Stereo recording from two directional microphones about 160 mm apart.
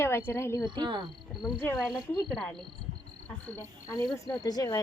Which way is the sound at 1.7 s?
Centre (ahead or behind).